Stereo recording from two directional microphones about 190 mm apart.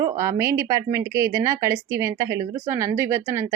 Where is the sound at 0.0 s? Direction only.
15° right (ahead or behind).